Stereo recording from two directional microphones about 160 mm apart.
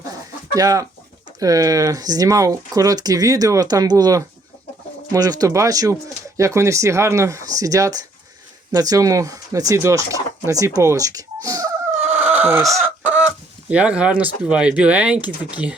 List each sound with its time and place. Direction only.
0.5 s speech: 20° right (ahead or behind)
11.9 s fowl: 45° right (ahead or behind)
12.2 s neigh: 10° right (ahead or behind)
13.7 s speech: 10° right (ahead or behind)